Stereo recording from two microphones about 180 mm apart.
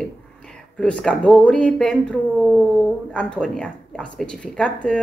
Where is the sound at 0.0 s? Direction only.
5° left (ahead or behind).